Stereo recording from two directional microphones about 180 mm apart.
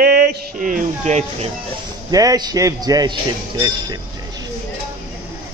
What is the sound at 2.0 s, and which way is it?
Mantra, 20° right (ahead or behind).